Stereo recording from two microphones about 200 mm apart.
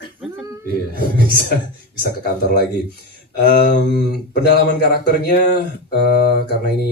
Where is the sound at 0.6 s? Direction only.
45° right (ahead or behind).